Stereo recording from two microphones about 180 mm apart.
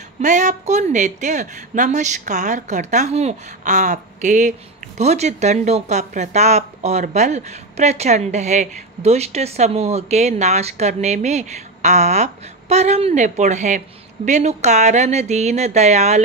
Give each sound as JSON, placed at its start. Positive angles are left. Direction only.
{"t": 0.2, "sound": "speech", "side_deg": -45}